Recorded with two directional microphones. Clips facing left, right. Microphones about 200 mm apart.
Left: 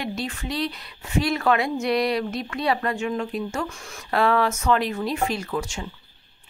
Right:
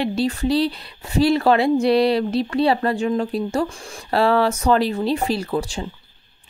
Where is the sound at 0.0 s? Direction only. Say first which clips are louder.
Right 9 dB; 30° right (ahead or behind).